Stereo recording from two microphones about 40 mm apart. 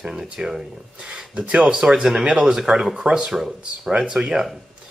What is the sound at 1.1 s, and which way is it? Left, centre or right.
Speech, right.